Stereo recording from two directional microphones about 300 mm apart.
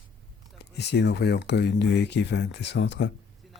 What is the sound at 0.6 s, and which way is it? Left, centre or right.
Speech, left.